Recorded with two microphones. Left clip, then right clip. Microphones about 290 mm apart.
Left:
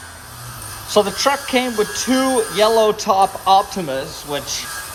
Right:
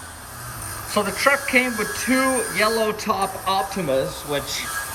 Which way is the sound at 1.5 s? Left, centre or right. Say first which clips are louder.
Left 2 dB; left.